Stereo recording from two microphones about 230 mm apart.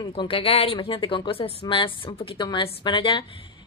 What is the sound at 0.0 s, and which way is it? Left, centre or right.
A woman's voice, left.